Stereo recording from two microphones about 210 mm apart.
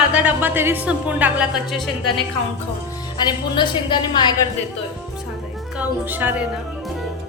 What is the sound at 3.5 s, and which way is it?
Speech, 20° left (ahead or behind).